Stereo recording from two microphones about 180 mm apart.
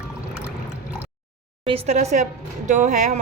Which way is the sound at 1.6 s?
35° right (ahead or behind).